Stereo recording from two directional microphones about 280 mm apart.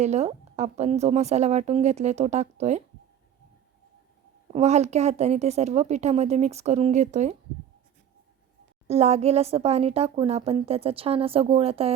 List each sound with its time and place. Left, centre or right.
0.0 s a woman's voice: right
4.5 s a woman's voice: right
8.9 s a woman's voice: right